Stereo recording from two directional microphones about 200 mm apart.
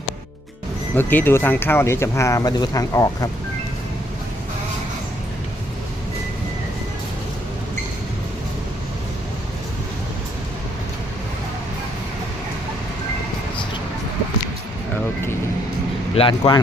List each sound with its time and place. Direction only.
0.9 s speech: 10° left (ahead or behind)
16.1 s speech: 25° left (ahead or behind)